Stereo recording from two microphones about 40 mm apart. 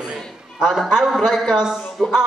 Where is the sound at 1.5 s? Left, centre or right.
Centre.